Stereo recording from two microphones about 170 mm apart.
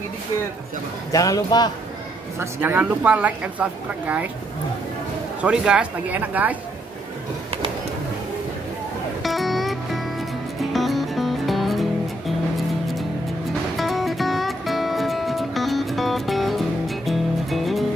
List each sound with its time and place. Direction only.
1.1 s a man's voice: 20° left (ahead or behind)
2.3 s speech: 10° right (ahead or behind)
5.4 s speech: 5° right (ahead or behind)
9.2 s music: centre (ahead or behind)
13.7 s music: centre (ahead or behind)